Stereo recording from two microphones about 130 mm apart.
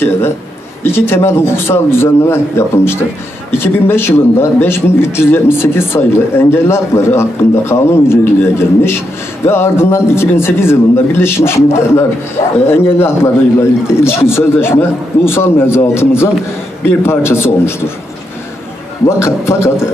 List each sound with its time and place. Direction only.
0.9 s a man's voice: 15° left (ahead or behind)
19.0 s a man's voice: 20° left (ahead or behind)